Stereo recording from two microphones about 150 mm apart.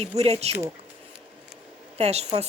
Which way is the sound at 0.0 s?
45° right (ahead or behind).